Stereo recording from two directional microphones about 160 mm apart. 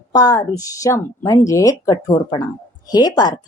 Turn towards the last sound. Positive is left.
turn(degrees=25)  # may be behind; listen again after turning